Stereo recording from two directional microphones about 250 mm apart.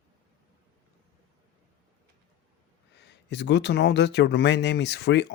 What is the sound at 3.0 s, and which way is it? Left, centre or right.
Speech, left.